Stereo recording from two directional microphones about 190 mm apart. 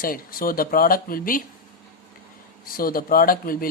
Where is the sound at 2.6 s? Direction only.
50° left (ahead or behind).